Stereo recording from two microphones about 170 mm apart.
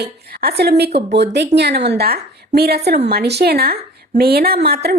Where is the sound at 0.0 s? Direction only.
70° right (ahead or behind).